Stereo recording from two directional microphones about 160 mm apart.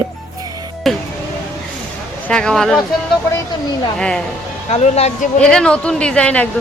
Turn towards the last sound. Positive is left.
turn(degrees=10)  # may be behind; listen again after turning